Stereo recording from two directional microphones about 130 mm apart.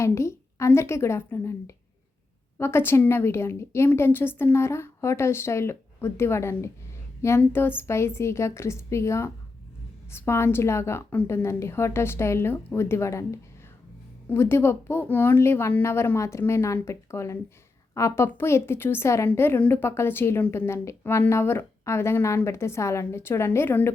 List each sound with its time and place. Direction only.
0.0 s a woman's voice: 20° left (ahead or behind)